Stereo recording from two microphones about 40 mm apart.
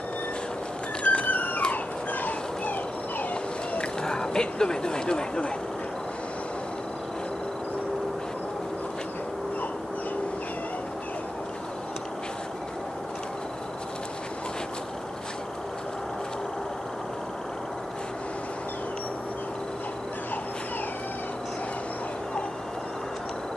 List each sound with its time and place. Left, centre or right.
1.0 s music: left
2.2 s a sound: left
4.0 s speech: centre